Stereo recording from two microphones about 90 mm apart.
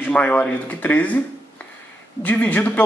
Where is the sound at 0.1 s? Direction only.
15° left (ahead or behind).